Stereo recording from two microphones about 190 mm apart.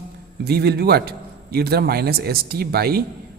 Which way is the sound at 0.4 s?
60° right (ahead or behind).